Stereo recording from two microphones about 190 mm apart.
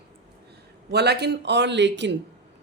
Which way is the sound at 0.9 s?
60° right (ahead or behind).